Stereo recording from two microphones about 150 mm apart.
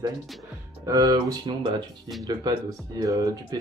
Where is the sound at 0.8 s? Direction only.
25° right (ahead or behind).